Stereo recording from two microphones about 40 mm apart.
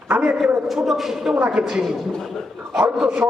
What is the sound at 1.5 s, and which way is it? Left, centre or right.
Speech, centre.